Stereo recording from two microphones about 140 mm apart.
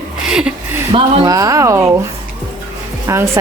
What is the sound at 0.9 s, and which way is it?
Speech, 25° right (ahead or behind).